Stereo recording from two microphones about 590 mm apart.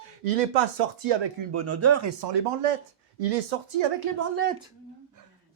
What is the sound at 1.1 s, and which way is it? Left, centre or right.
Speech, right.